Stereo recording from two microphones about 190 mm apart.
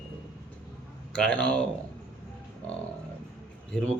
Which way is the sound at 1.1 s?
5° left (ahead or behind).